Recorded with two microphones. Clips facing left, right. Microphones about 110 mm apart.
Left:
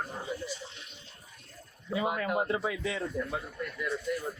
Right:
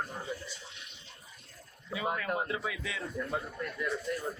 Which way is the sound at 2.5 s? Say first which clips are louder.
Left 5 dB; 30° left (ahead or behind).